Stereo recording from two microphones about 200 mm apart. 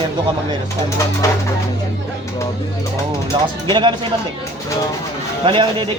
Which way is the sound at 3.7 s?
25° right (ahead or behind).